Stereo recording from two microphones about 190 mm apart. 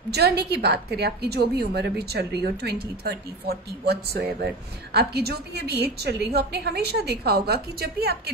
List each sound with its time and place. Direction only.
0.1 s a woman's voice: 60° right (ahead or behind)